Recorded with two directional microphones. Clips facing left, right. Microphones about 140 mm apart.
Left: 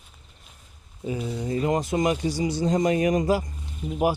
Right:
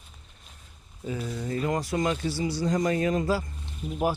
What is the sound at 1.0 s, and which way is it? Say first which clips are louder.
Speech: left 3 dB; 15° left (ahead or behind).